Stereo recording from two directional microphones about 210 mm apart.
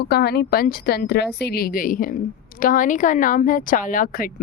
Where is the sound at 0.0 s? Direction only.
50° left (ahead or behind).